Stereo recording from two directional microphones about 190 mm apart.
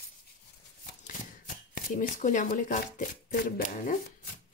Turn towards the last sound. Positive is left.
turn(degrees=45)  # may be behind; listen again after turning